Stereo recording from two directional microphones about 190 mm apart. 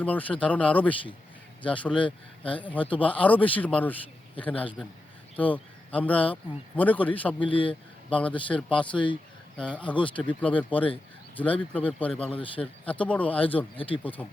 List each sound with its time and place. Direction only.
0.0 s speech: 10° left (ahead or behind)
7.5 s speech: 25° left (ahead or behind)
8.1 s speech: 5° left (ahead or behind)
8.7 s speech: 25° left (ahead or behind)
9.6 s speech: 5° left (ahead or behind)
12.3 s speech: 30° left (ahead or behind)
12.8 s speech: 5° left (ahead or behind)
13.7 s speech: 30° left (ahead or behind)
14.0 s speech: 10° left (ahead or behind)